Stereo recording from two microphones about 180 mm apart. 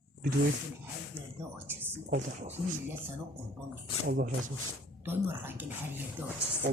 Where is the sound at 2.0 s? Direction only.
45° right (ahead or behind).